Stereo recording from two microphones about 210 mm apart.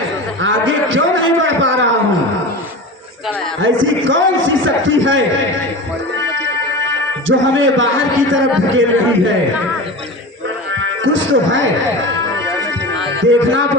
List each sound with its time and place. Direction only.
0.4 s a man's voice: 65° right (ahead or behind)
3.6 s a man's voice: 65° right (ahead or behind)
7.3 s a man's voice: 65° right (ahead or behind)
10.8 s music: 65° right (ahead or behind)